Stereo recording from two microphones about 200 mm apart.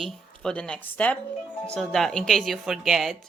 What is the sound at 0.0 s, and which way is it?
Speech, 5° left (ahead or behind).